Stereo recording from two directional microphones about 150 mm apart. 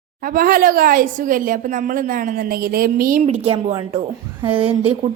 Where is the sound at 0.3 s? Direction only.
70° right (ahead or behind).